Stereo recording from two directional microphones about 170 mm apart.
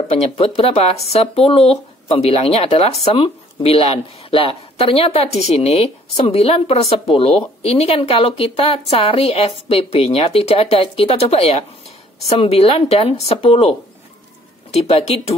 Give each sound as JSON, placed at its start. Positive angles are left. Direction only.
{"t": 0.1, "sound": "speech", "side_deg": 35}